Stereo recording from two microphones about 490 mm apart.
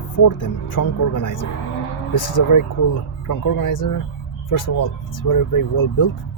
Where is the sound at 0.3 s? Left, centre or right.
Left.